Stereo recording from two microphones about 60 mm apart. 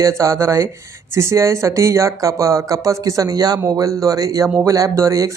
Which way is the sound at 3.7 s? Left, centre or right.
Right.